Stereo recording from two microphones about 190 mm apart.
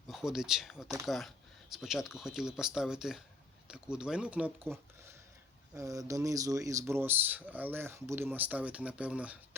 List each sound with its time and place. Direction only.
0.1 s speech: 5° right (ahead or behind)